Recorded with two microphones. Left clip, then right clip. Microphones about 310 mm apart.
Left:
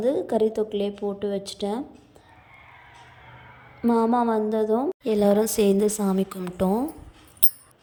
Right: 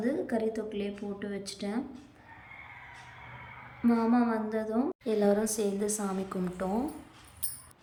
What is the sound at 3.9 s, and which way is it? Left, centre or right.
A woman's voice, centre.